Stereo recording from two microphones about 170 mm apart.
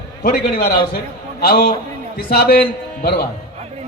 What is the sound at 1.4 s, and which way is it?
A man's voice, 60° left (ahead or behind).